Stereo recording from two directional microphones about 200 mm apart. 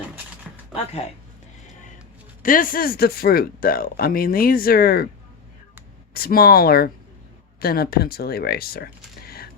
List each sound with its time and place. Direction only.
2.4 s speech: 40° left (ahead or behind)
6.1 s speech: 50° left (ahead or behind)
9.2 s a sound: 50° left (ahead or behind)